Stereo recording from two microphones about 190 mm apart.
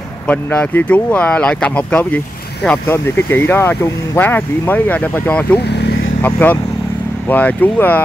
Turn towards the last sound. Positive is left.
turn(degrees=10)  # may be behind; listen again after turning